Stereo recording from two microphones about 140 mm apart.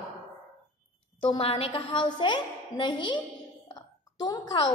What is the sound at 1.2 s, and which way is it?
A woman's voice, 40° left (ahead or behind).